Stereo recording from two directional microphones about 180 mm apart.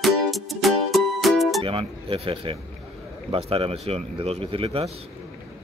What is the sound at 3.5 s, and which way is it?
Speech, 30° right (ahead or behind).